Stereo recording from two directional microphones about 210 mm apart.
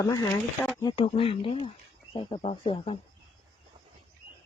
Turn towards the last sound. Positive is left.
turn(degrees=25)  # may be behind; listen again after turning